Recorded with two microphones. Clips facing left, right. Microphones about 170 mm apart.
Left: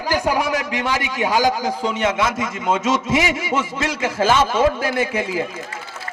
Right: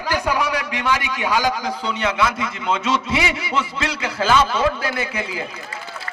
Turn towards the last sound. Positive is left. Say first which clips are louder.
# left 5 dB
turn(degrees=45)  # may be behind; listen again after turning